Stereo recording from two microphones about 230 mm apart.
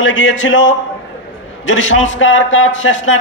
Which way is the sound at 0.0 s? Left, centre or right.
Left.